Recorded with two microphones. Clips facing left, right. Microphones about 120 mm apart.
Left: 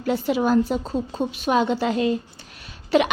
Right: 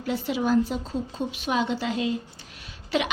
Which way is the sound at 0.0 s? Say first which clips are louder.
Left 5 dB; 50° left (ahead or behind).